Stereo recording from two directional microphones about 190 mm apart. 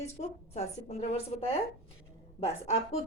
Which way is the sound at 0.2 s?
35° left (ahead or behind).